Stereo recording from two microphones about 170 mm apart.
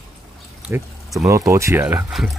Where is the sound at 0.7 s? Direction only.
10° right (ahead or behind).